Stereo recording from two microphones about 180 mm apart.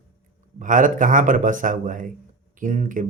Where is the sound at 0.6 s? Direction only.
45° right (ahead or behind).